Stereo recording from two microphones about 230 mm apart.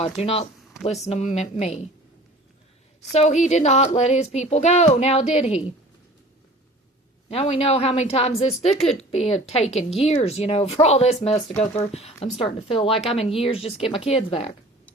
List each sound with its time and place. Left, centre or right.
0.0 s speech: left
3.1 s speech: left
7.3 s speech: left